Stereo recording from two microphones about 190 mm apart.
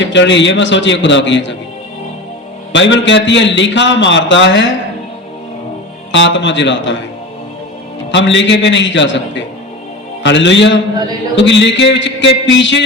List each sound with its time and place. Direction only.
0.0 s a man's voice: 70° left (ahead or behind)
2.7 s a man's voice: 70° left (ahead or behind)
6.1 s a man's voice: 75° left (ahead or behind)
8.1 s a man's voice: 70° left (ahead or behind)